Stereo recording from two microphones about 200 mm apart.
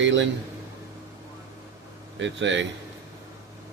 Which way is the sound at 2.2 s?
65° right (ahead or behind).